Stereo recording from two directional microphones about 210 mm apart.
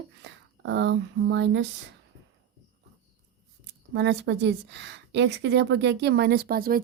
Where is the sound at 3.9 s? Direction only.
55° right (ahead or behind).